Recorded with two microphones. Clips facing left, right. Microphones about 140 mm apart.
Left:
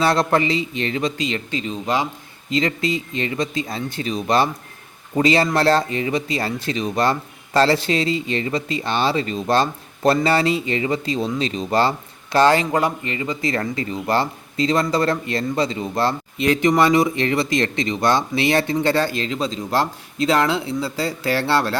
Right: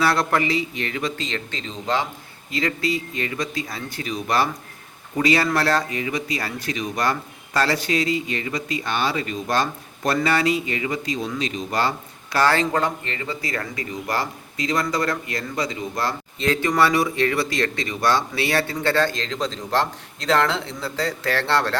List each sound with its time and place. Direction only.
0.0 s speech: 25° left (ahead or behind)
1.2 s speech: 10° left (ahead or behind)